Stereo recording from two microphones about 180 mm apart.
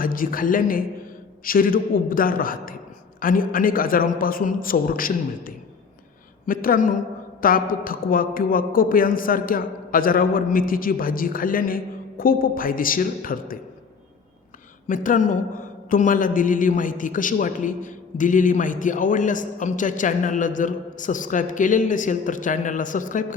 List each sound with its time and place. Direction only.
0.0 s a man's voice: 50° left (ahead or behind)
14.8 s a man's voice: 50° left (ahead or behind)